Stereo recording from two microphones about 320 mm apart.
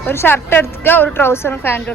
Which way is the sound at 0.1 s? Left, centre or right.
Centre.